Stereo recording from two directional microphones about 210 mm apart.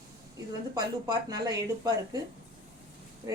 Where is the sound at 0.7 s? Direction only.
20° right (ahead or behind).